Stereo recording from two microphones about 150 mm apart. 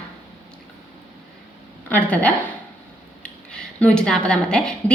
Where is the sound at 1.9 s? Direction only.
10° left (ahead or behind).